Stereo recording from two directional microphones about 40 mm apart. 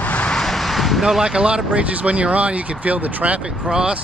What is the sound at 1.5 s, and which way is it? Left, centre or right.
Speech, right.